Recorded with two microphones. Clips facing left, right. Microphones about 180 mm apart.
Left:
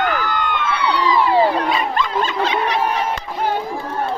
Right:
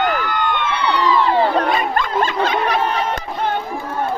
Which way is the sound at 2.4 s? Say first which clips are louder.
Right 1 dB; 45° right (ahead or behind).